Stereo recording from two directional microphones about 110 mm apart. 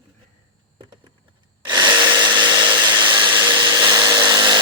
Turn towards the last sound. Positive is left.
turn(degrees=-40)  # may be behind; listen again after turning